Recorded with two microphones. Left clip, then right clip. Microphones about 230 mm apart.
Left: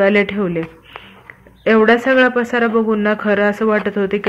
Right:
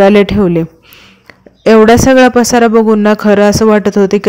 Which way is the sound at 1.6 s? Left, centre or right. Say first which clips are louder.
Right 7 dB; right.